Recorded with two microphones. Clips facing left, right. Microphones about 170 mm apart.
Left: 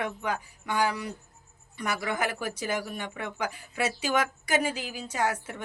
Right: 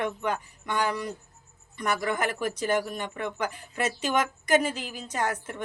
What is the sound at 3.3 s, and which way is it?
Speech, 5° left (ahead or behind).